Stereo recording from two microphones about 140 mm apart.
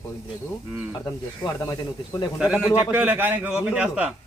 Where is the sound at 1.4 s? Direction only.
25° left (ahead or behind).